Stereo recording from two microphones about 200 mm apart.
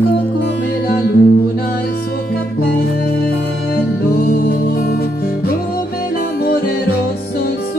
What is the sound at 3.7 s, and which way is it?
Music, 50° left (ahead or behind).